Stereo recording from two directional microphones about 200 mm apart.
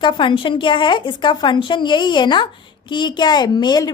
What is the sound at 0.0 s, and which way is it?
A woman's voice, 25° left (ahead or behind).